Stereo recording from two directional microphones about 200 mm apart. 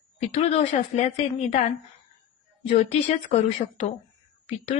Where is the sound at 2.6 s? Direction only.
30° left (ahead or behind).